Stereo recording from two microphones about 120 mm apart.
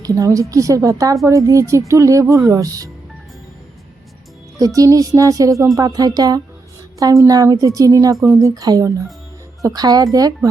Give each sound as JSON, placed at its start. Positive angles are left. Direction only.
{"t": 0.0, "sound": "a woman's voice", "side_deg": -30}
{"t": 4.5, "sound": "a woman's voice", "side_deg": -30}